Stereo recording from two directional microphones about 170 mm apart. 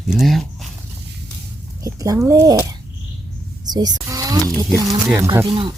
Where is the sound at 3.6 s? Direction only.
25° right (ahead or behind).